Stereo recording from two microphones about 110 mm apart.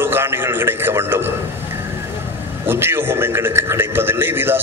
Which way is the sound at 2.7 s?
20° right (ahead or behind).